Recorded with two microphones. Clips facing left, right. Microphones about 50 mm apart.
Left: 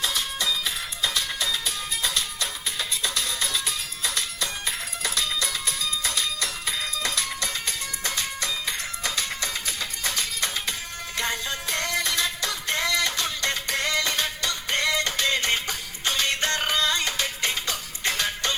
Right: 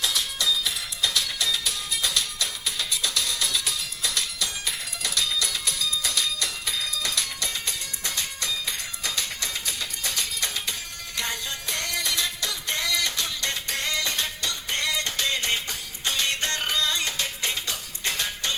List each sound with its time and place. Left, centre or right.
0.0 s music: left